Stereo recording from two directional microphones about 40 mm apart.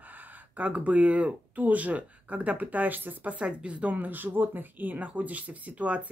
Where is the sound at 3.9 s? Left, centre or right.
Right.